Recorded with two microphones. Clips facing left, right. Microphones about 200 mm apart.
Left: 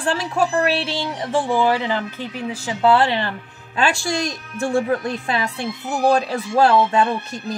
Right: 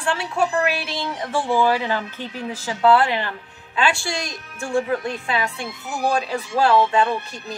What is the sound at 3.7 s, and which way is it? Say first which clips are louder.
Speech: left 2 dB; 40° left (ahead or behind).